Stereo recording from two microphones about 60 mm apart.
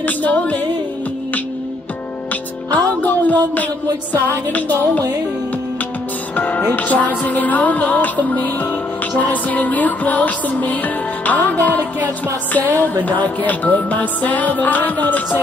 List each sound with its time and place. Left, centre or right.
0.0 s music: left
2.7 s music: left
6.3 s music: left